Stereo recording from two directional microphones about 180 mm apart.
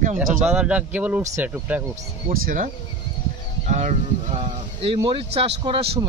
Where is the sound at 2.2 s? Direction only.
45° right (ahead or behind).